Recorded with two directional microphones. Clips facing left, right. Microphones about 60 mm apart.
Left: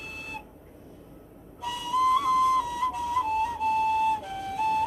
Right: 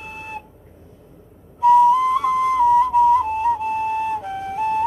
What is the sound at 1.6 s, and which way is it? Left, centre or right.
Flute, right.